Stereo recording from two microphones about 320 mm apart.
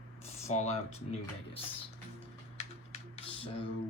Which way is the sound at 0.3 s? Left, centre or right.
Centre.